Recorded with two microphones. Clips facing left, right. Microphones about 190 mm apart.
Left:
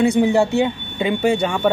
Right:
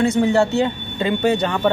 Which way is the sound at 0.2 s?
15° left (ahead or behind).